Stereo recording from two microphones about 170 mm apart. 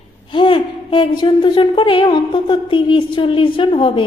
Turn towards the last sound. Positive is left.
turn(degrees=30)  # may be behind; listen again after turning